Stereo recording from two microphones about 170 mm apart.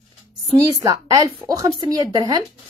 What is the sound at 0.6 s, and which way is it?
A woman's voice, 20° right (ahead or behind).